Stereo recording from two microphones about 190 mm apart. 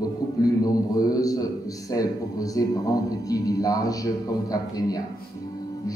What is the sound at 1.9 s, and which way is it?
A man's voice, 20° left (ahead or behind).